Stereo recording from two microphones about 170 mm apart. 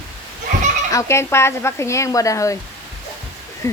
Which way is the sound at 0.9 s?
15° left (ahead or behind).